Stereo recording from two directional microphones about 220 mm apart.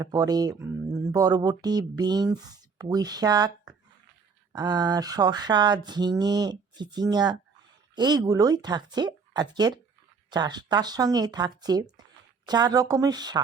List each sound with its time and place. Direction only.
0.0 s speech: 15° right (ahead or behind)
4.5 s a sound: 20° right (ahead or behind)
10.2 s speech: 20° right (ahead or behind)